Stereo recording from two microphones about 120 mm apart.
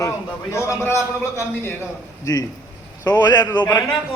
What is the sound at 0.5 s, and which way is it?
A man's voice, 25° left (ahead or behind).